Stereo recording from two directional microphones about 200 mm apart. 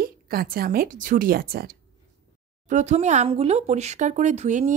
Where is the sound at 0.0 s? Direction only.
50° right (ahead or behind).